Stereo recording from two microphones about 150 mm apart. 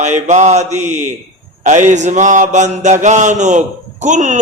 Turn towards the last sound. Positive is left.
turn(degrees=-55)  # may be behind; listen again after turning